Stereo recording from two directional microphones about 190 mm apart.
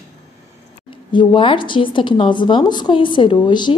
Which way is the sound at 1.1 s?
25° left (ahead or behind).